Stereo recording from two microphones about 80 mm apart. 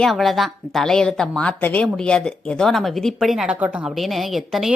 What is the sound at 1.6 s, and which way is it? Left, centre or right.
Speech, left.